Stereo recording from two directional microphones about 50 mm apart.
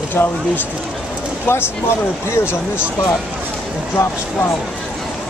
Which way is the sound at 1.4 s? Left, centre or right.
Left.